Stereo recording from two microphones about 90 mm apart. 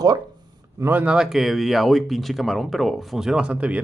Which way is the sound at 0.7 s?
25° right (ahead or behind).